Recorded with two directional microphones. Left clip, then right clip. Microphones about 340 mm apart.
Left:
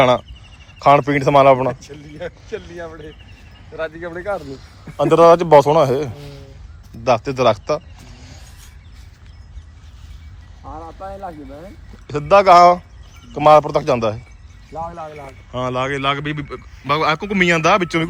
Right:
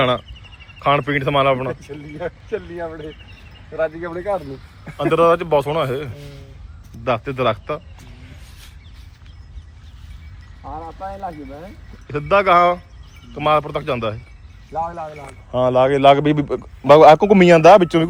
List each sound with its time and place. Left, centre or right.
0.0 s a man's voice: centre
1.8 s speech: centre
4.9 s a man's voice: centre
10.6 s vehicle: right
12.0 s a man's voice: centre
14.7 s a man's voice: centre